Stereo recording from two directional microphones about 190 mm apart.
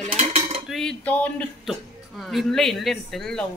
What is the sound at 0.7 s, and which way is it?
A woman's voice, 5° left (ahead or behind).